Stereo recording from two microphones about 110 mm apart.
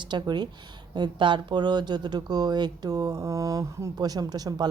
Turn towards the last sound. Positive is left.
turn(degrees=-35)  # may be behind; listen again after turning